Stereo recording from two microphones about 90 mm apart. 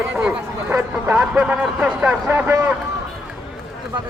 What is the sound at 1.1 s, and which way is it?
Speech, 15° right (ahead or behind).